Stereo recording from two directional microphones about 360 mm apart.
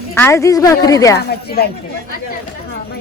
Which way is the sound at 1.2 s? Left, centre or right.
Left.